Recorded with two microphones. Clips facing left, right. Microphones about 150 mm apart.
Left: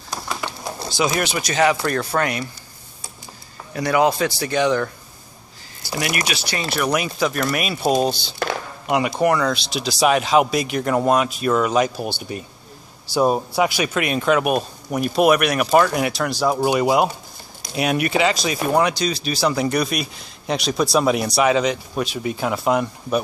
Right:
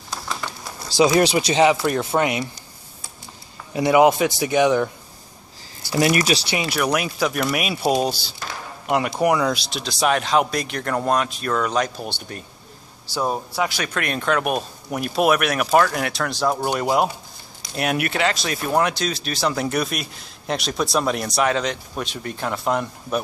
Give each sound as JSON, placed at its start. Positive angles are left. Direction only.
{"t": 0.1, "sound": "typewriter", "side_deg": 10}
{"t": 0.9, "sound": "speech", "side_deg": -30}
{"t": 3.7, "sound": "a man's voice", "side_deg": -20}
{"t": 5.9, "sound": "speech", "side_deg": -30}
{"t": 6.7, "sound": "speech", "side_deg": 0}
{"t": 13.1, "sound": "speech", "side_deg": 15}